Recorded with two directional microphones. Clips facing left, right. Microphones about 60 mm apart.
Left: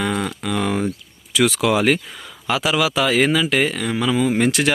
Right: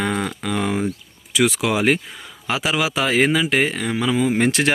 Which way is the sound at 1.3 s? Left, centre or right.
Right.